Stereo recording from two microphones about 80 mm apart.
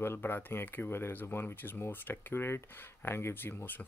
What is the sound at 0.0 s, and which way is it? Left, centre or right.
Speech, left.